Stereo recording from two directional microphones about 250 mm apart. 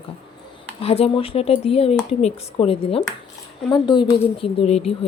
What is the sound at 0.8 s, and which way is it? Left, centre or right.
Speech, left.